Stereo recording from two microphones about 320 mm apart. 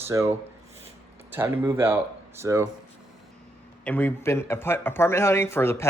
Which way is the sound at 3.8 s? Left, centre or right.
Centre.